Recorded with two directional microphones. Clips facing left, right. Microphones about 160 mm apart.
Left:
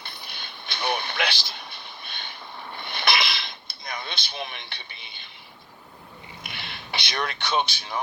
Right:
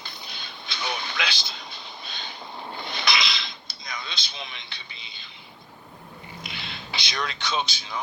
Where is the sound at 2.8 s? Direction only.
60° left (ahead or behind).